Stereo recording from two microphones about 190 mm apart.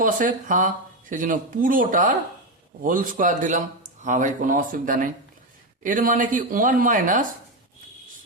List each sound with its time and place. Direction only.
0.0 s speech: 45° right (ahead or behind)